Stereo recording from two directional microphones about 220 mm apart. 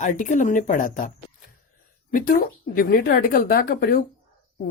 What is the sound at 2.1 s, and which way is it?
A woman's voice, 40° left (ahead or behind).